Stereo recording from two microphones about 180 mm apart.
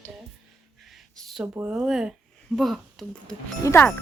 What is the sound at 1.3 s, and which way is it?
Speech, 5° right (ahead or behind).